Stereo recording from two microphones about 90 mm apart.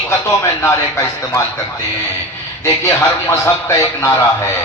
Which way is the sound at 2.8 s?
30° left (ahead or behind).